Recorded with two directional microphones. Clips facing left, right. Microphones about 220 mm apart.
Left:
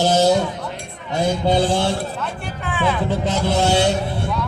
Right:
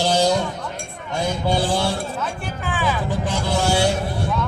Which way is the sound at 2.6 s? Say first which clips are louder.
Left 3 dB; centre (ahead or behind).